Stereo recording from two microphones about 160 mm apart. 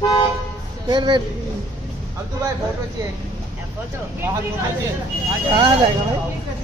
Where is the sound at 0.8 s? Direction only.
30° right (ahead or behind).